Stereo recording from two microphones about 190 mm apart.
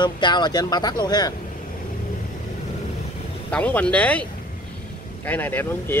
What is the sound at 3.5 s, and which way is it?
Speech, 5° left (ahead or behind).